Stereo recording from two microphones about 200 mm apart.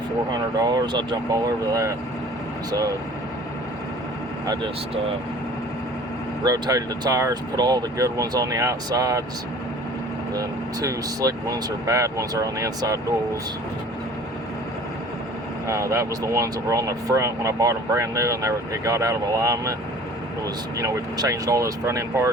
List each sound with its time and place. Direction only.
0.3 s speech: 20° right (ahead or behind)
6.4 s speech: 20° right (ahead or behind)
10.3 s speech: 15° right (ahead or behind)
15.6 s speech: 15° right (ahead or behind)
20.7 s speech: 15° right (ahead or behind)